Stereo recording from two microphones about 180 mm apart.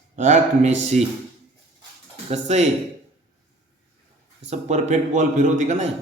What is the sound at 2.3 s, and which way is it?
Speech, 40° right (ahead or behind).